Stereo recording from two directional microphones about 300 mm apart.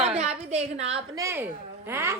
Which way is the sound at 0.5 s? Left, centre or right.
Right.